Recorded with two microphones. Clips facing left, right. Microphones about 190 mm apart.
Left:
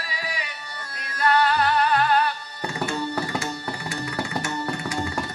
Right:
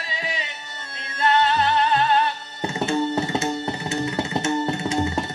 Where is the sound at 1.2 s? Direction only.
25° right (ahead or behind).